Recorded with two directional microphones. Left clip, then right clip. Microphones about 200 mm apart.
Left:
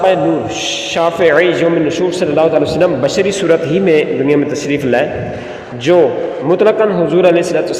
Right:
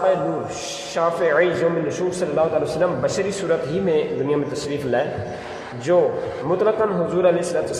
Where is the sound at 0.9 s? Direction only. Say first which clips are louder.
Left 7 dB; 30° left (ahead or behind).